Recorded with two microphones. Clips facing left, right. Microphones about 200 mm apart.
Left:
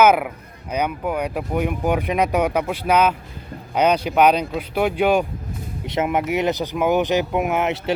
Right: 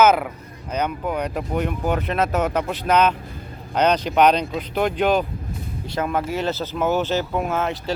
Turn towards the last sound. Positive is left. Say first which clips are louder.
# left 3 dB
turn(degrees=20)  # may be behind; listen again after turning